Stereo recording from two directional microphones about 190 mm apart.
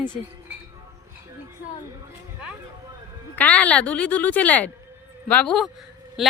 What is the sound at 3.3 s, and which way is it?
A woman's voice, 10° left (ahead or behind).